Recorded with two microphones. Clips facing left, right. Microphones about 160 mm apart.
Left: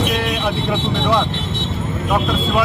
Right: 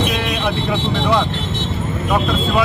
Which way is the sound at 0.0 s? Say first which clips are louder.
Even; centre (ahead or behind).